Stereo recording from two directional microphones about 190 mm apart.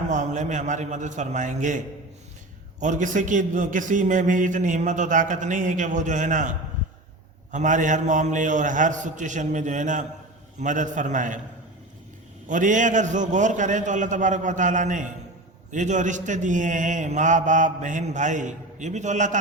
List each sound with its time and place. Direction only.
0.1 s a man's voice: 40° right (ahead or behind)
2.8 s a man's voice: 40° right (ahead or behind)
7.5 s a man's voice: 40° right (ahead or behind)
12.5 s a man's voice: 40° right (ahead or behind)